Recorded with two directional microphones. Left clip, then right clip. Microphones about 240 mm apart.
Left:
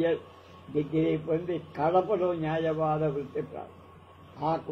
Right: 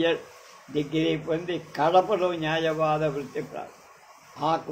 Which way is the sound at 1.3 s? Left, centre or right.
Right.